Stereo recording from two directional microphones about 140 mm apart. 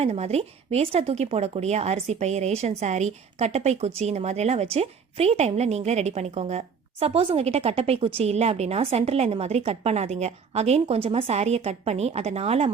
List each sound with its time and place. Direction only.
0.0 s a woman's voice: 50° right (ahead or behind)